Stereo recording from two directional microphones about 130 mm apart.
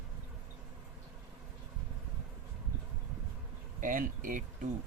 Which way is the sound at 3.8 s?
90° right.